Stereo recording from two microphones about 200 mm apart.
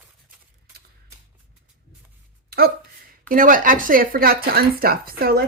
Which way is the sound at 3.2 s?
45° right (ahead or behind).